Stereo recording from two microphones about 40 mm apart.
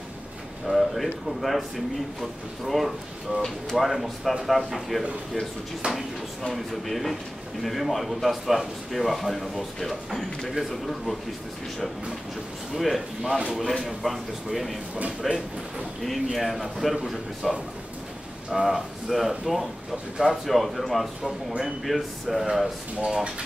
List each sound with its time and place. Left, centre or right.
0.7 s a man's voice: centre
5.8 s speech: right
6.5 s a man's voice: centre
12.7 s a man's voice: centre
15.0 s speech: right
16.3 s a man's voice: centre